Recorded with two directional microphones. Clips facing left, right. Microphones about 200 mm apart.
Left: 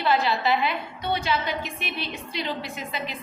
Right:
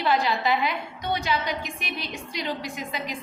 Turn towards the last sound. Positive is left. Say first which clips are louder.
# even
turn(degrees=-15)  # may be behind; listen again after turning